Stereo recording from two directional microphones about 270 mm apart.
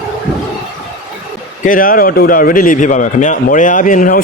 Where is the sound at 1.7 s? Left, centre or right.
Left.